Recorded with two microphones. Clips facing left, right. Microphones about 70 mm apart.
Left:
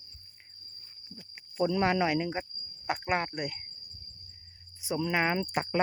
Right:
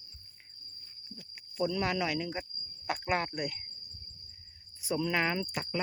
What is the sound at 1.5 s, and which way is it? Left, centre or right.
Speech, left.